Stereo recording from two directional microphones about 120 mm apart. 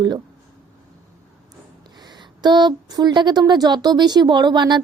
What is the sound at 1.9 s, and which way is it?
A woman's voice, 35° right (ahead or behind).